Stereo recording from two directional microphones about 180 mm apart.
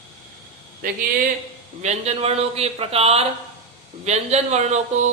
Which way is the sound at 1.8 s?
35° right (ahead or behind).